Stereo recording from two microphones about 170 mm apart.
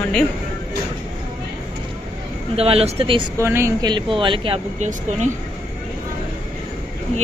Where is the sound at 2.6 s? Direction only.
35° right (ahead or behind).